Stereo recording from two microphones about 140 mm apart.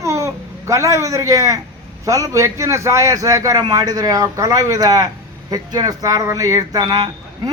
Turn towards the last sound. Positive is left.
turn(degrees=-30)  # may be behind; listen again after turning